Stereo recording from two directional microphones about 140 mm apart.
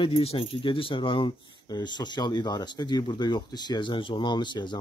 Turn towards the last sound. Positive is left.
turn(degrees=35)  # may be behind; listen again after turning